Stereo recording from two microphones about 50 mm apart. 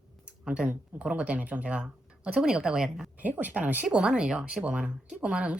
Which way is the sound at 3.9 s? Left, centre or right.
Centre.